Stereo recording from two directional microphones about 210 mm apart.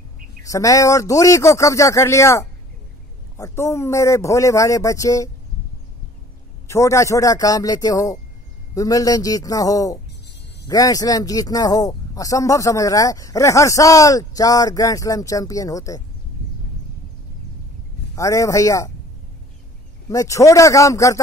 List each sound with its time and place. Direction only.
0.4 s speech: 15° left (ahead or behind)
6.7 s speech: 15° left (ahead or behind)
18.1 s speech: 15° left (ahead or behind)
20.1 s speech: 15° left (ahead or behind)